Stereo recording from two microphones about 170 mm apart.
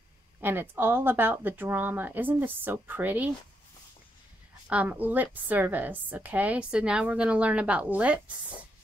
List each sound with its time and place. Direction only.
0.4 s a woman's voice: 10° right (ahead or behind)
4.6 s a woman's voice: 10° right (ahead or behind)